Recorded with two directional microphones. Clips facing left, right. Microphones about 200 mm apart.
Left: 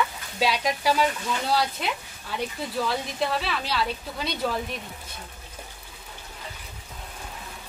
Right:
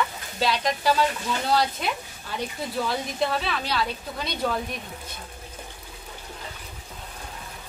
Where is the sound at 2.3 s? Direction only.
Centre (ahead or behind).